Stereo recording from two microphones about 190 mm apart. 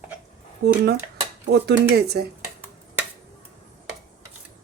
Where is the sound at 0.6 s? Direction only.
55° right (ahead or behind).